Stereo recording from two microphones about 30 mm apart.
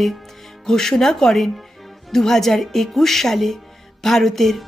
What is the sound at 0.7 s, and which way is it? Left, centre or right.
Speech, centre.